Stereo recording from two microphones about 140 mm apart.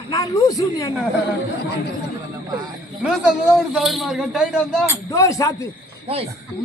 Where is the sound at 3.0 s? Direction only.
5° right (ahead or behind).